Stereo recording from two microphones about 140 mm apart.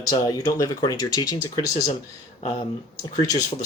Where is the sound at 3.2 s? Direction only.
25° left (ahead or behind).